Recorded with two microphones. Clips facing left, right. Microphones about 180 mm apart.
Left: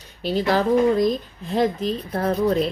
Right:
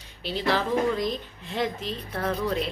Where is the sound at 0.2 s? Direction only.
45° left (ahead or behind).